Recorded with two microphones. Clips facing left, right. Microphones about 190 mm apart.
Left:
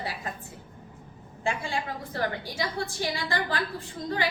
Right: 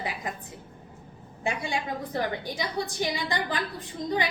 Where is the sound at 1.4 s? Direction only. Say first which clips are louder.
Even; 20° right (ahead or behind).